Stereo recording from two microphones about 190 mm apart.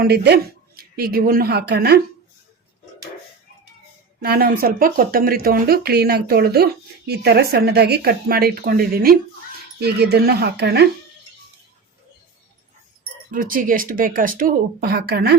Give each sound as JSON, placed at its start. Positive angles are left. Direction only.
{"t": 0.0, "sound": "speech", "side_deg": -60}
{"t": 4.2, "sound": "speech", "side_deg": -50}
{"t": 13.3, "sound": "speech", "side_deg": -45}